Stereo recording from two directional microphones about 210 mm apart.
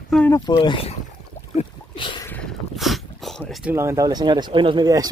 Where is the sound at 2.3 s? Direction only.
Centre (ahead or behind).